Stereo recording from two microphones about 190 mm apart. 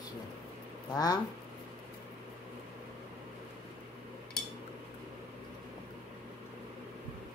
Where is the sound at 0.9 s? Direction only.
20° left (ahead or behind).